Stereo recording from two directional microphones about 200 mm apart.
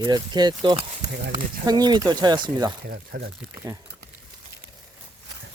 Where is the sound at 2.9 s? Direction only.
50° right (ahead or behind).